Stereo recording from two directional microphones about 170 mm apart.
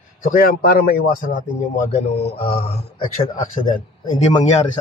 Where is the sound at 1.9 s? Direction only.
40° left (ahead or behind).